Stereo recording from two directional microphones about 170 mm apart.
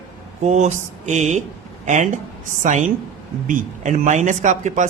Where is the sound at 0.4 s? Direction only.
45° right (ahead or behind).